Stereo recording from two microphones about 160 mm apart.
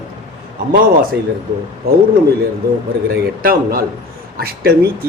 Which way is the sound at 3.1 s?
65° right (ahead or behind).